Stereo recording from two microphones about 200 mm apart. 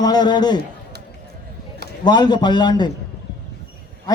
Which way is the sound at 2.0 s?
20° left (ahead or behind).